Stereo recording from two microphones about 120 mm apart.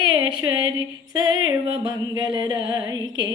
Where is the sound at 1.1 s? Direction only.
35° right (ahead or behind).